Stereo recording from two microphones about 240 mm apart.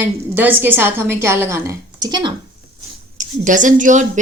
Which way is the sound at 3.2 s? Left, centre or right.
Right.